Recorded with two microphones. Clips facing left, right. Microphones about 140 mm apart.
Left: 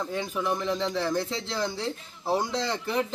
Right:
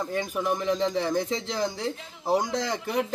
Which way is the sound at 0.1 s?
10° right (ahead or behind).